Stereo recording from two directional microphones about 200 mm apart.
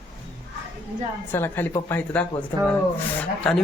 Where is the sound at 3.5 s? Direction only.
Centre (ahead or behind).